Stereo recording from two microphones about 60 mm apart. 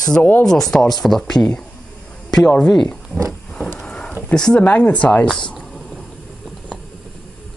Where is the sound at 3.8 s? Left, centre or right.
Centre.